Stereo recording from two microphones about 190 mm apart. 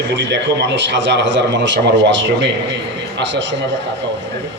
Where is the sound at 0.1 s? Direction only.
70° right (ahead or behind).